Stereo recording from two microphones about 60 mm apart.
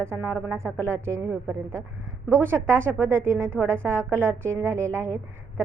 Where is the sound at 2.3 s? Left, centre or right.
Right.